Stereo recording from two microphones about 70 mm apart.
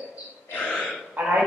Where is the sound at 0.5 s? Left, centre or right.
Centre.